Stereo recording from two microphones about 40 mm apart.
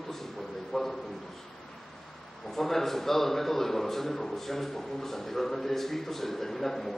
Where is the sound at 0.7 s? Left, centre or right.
Centre.